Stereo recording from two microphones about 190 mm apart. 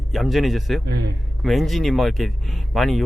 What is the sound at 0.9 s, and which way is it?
Speech, 60° right (ahead or behind).